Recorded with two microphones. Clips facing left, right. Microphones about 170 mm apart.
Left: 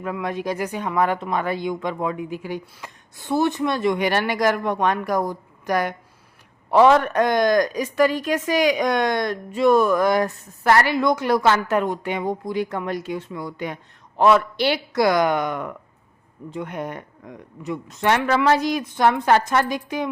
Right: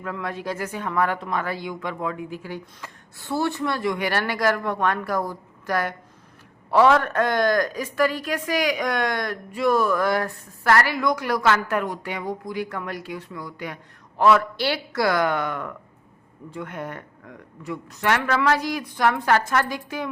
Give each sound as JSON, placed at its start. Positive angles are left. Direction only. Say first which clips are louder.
{"t": 0.0, "sound": "speech", "louder": "left 4 dB", "side_deg": 20}